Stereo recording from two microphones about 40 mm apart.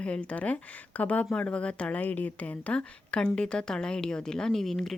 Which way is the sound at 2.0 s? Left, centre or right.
Left.